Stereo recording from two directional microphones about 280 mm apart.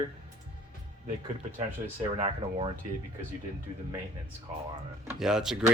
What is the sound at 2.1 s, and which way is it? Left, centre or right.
Speech, centre.